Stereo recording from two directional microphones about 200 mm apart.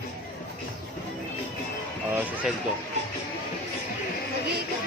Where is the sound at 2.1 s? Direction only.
10° right (ahead or behind).